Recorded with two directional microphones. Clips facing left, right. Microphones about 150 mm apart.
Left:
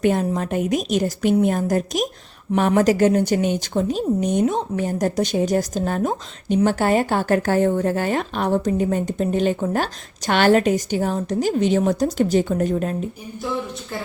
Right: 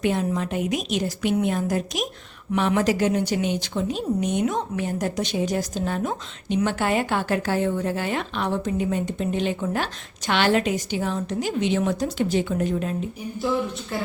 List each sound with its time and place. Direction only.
0.0 s a woman's voice: 45° left (ahead or behind)